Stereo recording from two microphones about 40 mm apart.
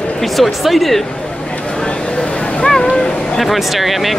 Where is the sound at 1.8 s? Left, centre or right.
Left.